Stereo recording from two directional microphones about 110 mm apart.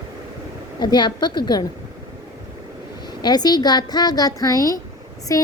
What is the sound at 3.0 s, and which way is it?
A woman's voice, 40° left (ahead or behind).